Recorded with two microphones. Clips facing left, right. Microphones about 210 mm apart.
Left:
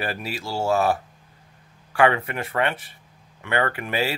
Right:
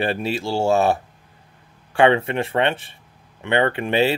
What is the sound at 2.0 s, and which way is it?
Speech, 25° right (ahead or behind).